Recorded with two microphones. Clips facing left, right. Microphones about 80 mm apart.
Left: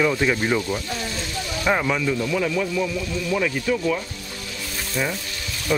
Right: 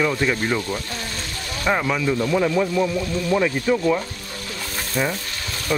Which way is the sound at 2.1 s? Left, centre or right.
Right.